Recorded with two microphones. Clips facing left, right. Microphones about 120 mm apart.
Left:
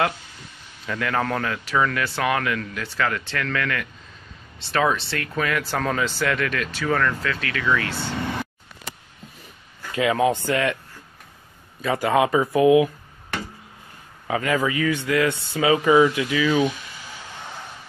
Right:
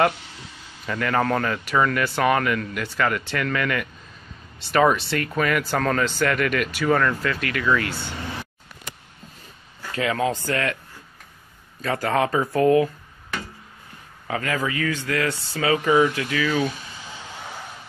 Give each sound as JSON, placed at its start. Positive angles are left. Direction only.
{"t": 0.8, "sound": "speech", "side_deg": 0}
{"t": 9.9, "sound": "speech", "side_deg": 20}
{"t": 11.8, "sound": "speech", "side_deg": 10}
{"t": 14.2, "sound": "speech", "side_deg": 15}